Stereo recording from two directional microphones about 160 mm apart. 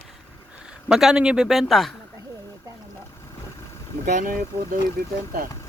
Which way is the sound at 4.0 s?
55° right (ahead or behind).